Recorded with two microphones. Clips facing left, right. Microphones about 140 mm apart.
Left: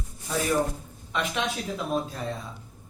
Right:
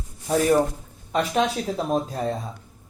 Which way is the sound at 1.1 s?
40° right (ahead or behind).